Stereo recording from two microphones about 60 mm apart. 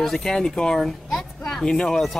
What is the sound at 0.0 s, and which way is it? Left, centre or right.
Speech, centre.